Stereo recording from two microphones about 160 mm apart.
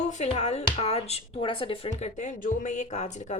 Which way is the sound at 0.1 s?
45° left (ahead or behind).